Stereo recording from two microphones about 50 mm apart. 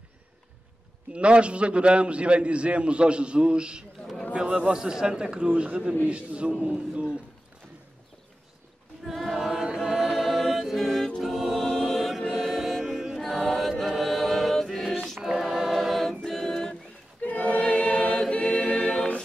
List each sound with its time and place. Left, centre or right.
1.1 s a man's voice: right
9.0 s choir: centre
9.3 s choir: centre
13.2 s choir: centre
16.3 s a sound: centre
17.2 s choir: left
18.4 s a capella: centre